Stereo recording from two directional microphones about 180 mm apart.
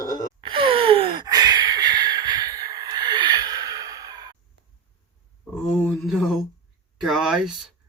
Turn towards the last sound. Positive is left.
turn(degrees=0)  # may be behind; listen again after turning